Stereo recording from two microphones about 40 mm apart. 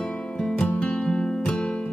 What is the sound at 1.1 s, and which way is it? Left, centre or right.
Music, left.